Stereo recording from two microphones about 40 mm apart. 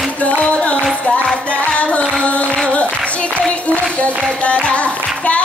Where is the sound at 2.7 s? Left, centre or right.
Left.